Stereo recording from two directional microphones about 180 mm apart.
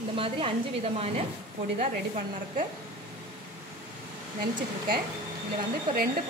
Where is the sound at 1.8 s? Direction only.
40° right (ahead or behind).